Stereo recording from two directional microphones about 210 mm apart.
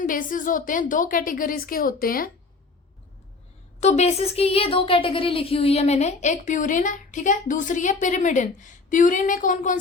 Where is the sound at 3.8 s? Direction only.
30° left (ahead or behind).